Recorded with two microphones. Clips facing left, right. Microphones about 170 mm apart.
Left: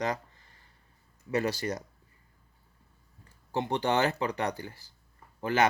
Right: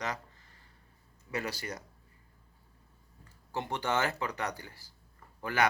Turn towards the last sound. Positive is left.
turn(degrees=25)  # may be behind; listen again after turning